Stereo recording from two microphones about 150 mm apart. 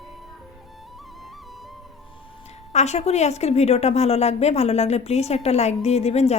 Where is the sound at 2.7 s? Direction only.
50° left (ahead or behind).